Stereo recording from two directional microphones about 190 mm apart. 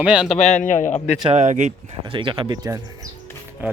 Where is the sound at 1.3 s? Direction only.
40° right (ahead or behind).